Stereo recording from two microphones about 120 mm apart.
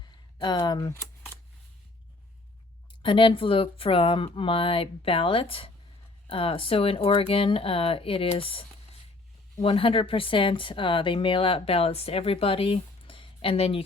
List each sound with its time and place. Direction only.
0.3 s speech: 40° left (ahead or behind)
3.0 s speech: 45° left (ahead or behind)